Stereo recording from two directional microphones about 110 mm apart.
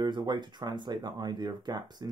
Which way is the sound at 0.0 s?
40° right (ahead or behind).